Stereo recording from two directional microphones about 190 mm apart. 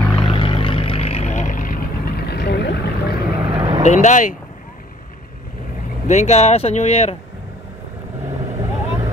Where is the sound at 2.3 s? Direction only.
60° left (ahead or behind).